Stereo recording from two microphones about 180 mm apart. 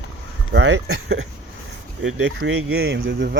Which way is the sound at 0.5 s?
75° right (ahead or behind).